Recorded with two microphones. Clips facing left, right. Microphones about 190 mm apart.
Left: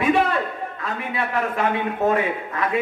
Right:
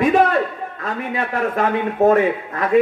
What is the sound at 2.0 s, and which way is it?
Speech, 40° right (ahead or behind).